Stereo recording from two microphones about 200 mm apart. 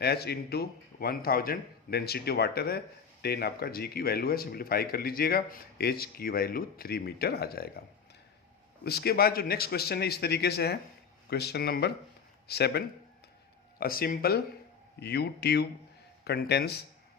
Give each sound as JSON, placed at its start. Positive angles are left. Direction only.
{"t": 0.0, "sound": "a man's voice", "side_deg": 55}
{"t": 8.8, "sound": "a man's voice", "side_deg": 55}